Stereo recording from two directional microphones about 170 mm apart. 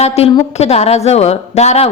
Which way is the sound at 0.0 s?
40° left (ahead or behind).